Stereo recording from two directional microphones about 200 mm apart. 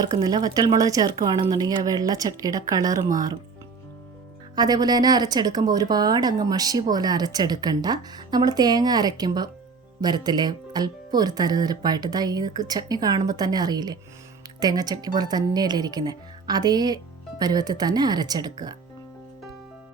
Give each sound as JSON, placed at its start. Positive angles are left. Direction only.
{"t": 0.0, "sound": "speech", "side_deg": -20}
{"t": 4.5, "sound": "speech", "side_deg": -20}